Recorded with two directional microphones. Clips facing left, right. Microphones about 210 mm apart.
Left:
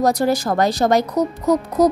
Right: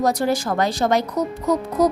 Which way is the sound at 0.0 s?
40° left (ahead or behind).